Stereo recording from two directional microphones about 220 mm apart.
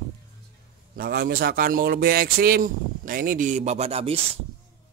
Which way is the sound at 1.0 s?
45° right (ahead or behind).